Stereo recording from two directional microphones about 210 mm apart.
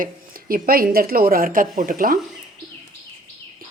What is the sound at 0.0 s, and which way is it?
Speech, 40° right (ahead or behind).